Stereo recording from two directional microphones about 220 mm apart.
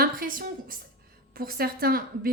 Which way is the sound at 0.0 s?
40° right (ahead or behind).